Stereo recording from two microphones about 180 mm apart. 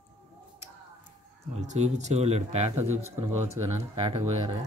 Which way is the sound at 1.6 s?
40° right (ahead or behind).